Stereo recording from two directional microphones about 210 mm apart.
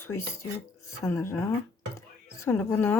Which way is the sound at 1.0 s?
15° left (ahead or behind).